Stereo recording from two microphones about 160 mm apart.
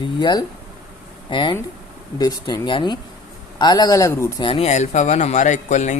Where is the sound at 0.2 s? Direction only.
25° left (ahead or behind).